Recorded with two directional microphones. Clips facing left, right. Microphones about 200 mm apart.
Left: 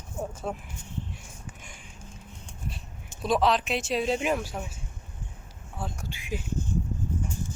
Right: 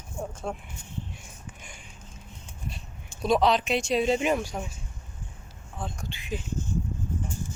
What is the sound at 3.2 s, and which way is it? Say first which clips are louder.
Speech: right 2 dB; centre (ahead or behind).